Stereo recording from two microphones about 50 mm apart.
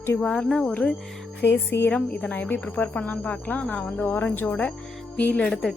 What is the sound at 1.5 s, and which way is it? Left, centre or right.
Speech, left.